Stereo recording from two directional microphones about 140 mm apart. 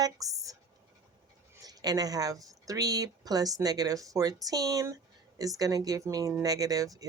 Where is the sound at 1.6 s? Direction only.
25° right (ahead or behind).